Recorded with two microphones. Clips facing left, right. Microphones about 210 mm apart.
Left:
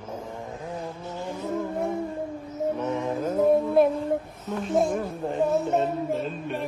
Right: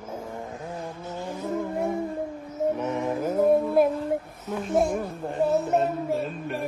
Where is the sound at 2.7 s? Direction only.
15° right (ahead or behind).